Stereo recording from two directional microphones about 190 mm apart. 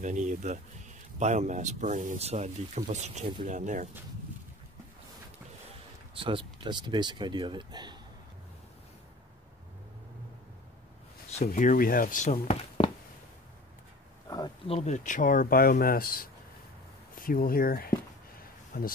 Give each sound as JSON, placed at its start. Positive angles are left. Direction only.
{"t": 0.0, "sound": "speech", "side_deg": -40}
{"t": 6.1, "sound": "speech", "side_deg": -25}
{"t": 11.4, "sound": "speech", "side_deg": 45}
{"t": 14.3, "sound": "a sound", "side_deg": 20}
{"t": 14.8, "sound": "speech", "side_deg": 40}